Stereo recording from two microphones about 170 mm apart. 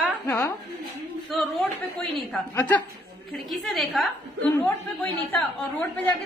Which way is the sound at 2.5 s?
10° left (ahead or behind).